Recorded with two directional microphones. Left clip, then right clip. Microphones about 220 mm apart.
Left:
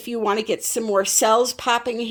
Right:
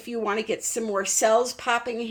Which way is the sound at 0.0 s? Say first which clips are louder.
Left 5 dB; 45° left (ahead or behind).